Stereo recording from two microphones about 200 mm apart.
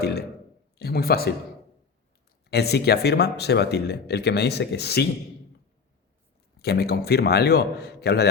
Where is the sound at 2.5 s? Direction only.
55° left (ahead or behind).